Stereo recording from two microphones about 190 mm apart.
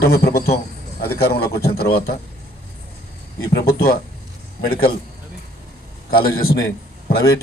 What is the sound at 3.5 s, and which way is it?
A man's voice, 55° left (ahead or behind).